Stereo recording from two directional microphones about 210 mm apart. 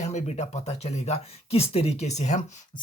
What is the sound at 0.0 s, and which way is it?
Speech, 35° left (ahead or behind).